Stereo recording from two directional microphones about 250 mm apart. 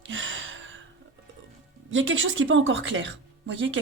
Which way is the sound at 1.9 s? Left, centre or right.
Right.